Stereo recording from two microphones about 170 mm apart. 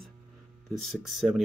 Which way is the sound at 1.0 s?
Centre (ahead or behind).